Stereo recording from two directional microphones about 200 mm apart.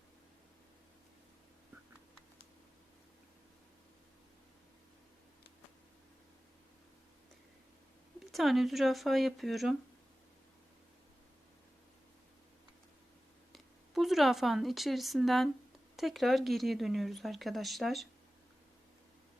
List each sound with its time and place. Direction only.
8.3 s speech: centre (ahead or behind)
13.5 s speech: centre (ahead or behind)